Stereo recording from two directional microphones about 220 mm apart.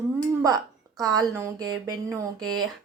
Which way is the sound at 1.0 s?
15° right (ahead or behind).